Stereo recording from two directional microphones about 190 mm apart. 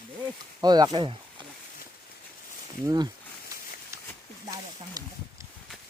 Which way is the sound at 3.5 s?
15° right (ahead or behind).